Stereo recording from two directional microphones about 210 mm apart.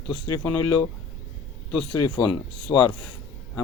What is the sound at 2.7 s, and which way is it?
Speech, 15° left (ahead or behind).